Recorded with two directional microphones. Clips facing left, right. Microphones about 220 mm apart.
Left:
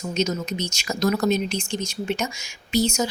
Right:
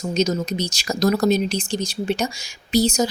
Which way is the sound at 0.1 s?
35° right (ahead or behind).